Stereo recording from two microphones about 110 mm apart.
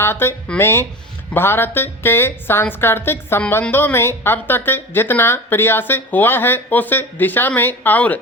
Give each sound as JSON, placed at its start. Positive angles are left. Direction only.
{"t": 0.0, "sound": "speech", "side_deg": 20}